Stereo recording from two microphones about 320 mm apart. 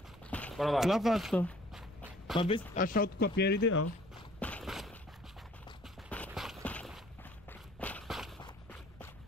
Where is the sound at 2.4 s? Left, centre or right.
Centre; by 3.8 s left.